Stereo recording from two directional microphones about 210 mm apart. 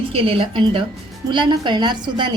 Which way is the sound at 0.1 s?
25° right (ahead or behind).